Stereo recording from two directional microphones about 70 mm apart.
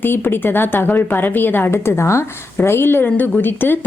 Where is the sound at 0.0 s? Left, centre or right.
Left.